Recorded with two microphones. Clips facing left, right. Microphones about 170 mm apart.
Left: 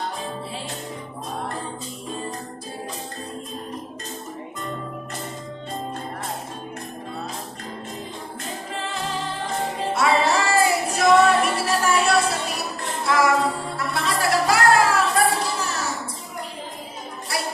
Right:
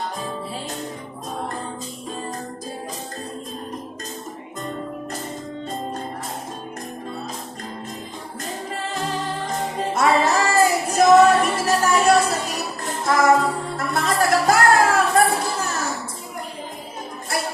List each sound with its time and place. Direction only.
9.5 s music: 40° right (ahead or behind)
10.2 s a sound: 40° right (ahead or behind)
10.9 s music: 40° right (ahead or behind)